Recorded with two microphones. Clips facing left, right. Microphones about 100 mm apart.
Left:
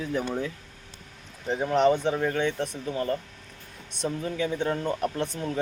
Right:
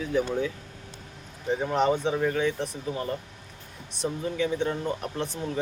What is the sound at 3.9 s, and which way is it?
Speech, centre (ahead or behind).